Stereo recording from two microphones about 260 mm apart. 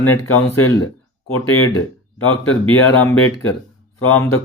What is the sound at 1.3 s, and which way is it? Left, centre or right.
Speech, left.